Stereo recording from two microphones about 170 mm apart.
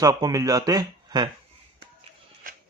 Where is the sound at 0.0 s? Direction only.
20° right (ahead or behind).